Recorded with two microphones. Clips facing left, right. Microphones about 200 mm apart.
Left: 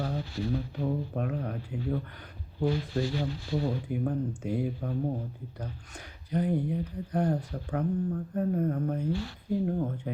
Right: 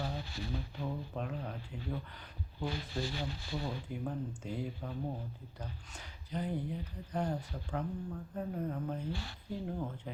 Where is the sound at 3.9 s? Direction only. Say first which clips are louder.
Left 8 dB; 55° left (ahead or behind).